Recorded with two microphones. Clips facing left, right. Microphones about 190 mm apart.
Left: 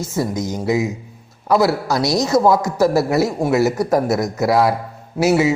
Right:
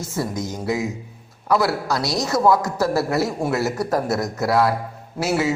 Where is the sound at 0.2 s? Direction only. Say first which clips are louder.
Left 4 dB; 20° left (ahead or behind).